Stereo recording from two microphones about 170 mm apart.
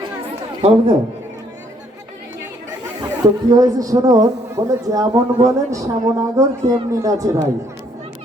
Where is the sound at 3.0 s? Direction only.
20° right (ahead or behind).